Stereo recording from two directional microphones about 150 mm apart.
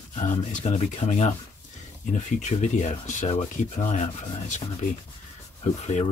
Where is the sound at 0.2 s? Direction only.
55° left (ahead or behind).